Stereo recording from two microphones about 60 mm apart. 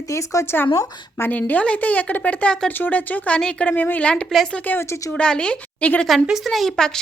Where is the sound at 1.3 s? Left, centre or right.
Left.